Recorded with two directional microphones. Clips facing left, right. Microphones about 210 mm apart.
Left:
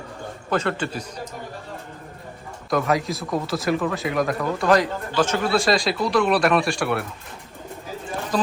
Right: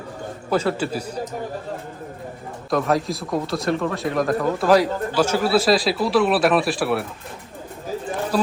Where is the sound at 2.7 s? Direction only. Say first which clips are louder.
Right 1 dB; centre (ahead or behind).